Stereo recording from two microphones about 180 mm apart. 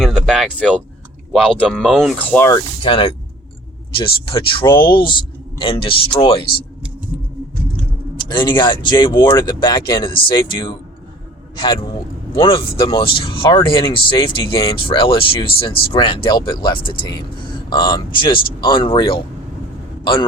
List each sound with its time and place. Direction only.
0.0 s a sound: centre (ahead or behind)
1.3 s speech: 5° left (ahead or behind)
2.5 s speech: 25° left (ahead or behind)
8.1 s speech: 25° left (ahead or behind)